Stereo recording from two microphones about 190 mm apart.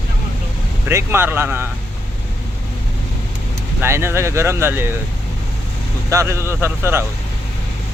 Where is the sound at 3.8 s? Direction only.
15° right (ahead or behind).